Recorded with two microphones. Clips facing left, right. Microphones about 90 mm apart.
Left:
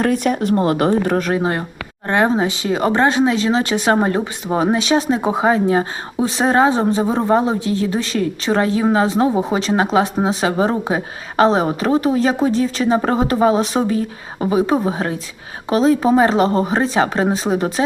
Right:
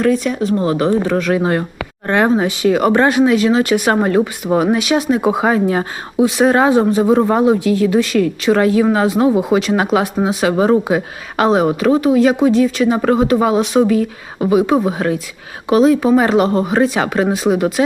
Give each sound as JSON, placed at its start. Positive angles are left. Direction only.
{"t": 0.0, "sound": "speech", "side_deg": 55}
{"t": 1.1, "sound": "speech", "side_deg": 40}
{"t": 2.0, "sound": "speech", "side_deg": 20}